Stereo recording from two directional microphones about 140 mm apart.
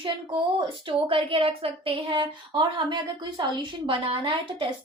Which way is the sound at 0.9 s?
40° right (ahead or behind).